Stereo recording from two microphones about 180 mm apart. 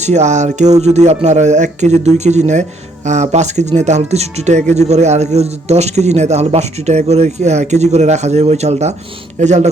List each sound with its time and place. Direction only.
0.0 s a man's voice: 40° right (ahead or behind)